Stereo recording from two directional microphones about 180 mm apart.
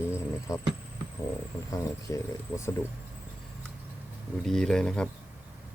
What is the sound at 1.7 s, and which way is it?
Speech, 15° left (ahead or behind).